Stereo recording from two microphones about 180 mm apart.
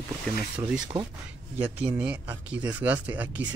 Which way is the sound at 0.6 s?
5° right (ahead or behind).